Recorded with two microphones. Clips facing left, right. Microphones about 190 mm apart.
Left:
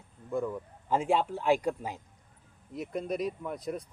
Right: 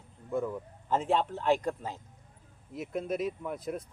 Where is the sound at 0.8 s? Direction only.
10° left (ahead or behind).